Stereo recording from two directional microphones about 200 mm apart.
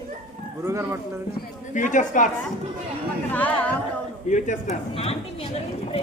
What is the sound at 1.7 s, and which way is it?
Speech, 40° left (ahead or behind).